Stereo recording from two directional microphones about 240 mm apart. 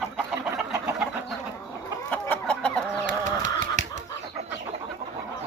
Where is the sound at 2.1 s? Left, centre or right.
Centre.